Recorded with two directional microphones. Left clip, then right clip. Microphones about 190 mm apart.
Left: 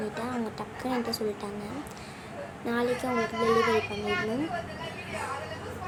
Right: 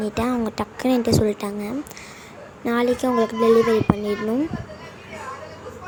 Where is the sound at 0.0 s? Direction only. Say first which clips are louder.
Right 9 dB; 35° right (ahead or behind).